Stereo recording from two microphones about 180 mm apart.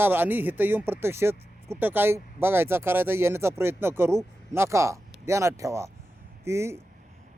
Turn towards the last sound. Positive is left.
turn(degrees=-15)  # may be behind; listen again after turning